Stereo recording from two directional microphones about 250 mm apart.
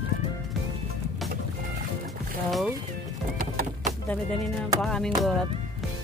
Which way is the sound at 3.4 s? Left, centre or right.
Right.